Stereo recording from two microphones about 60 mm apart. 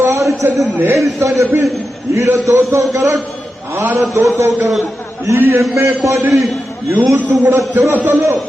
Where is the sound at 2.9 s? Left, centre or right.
Right.